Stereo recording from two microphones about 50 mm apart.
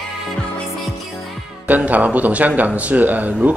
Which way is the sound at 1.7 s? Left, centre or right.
Right.